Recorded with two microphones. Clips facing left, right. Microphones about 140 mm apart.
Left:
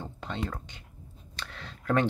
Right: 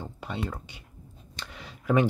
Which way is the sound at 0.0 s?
10° right (ahead or behind).